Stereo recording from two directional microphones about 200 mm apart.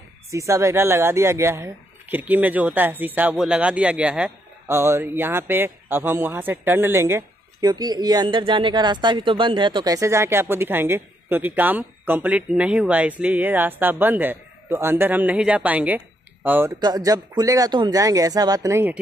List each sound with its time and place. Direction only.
0.3 s speech: 15° right (ahead or behind)